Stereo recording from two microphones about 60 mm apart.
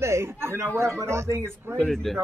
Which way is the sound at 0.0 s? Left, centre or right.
Right.